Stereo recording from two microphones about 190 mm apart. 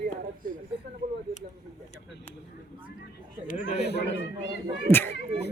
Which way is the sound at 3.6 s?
65° left (ahead or behind).